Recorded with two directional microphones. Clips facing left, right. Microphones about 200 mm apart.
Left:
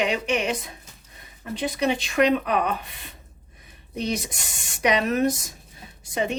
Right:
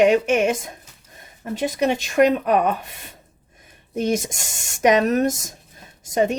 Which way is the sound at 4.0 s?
45° right (ahead or behind).